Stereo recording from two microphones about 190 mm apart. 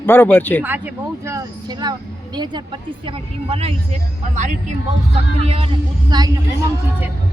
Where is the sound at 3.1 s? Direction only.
30° right (ahead or behind).